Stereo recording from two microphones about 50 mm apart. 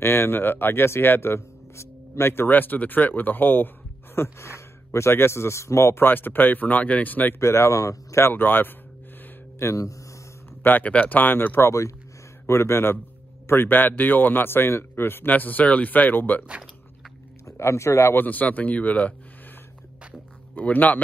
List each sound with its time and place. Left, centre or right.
0.0 s speech: left
4.2 s speech: left
5.9 s speech: left
7.3 s speech: left
8.2 s speech: left
9.6 s speech: left
10.6 s speech: left
12.4 s speech: left
13.5 s speech: left
17.5 s speech: left
18.1 s speech: left
20.5 s speech: left